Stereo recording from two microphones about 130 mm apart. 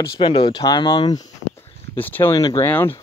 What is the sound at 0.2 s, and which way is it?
Speech, 35° left (ahead or behind).